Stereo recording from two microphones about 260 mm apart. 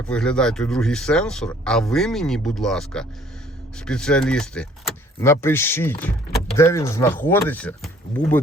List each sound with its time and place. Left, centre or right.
0.1 s speech: centre